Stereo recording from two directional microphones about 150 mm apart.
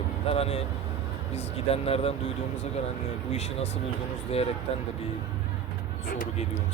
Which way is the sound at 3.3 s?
45° left (ahead or behind).